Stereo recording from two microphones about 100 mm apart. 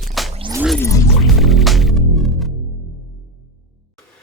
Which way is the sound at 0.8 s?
30° left (ahead or behind).